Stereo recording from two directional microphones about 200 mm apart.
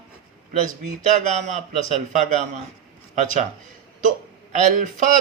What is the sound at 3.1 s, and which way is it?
Speech, 40° right (ahead or behind).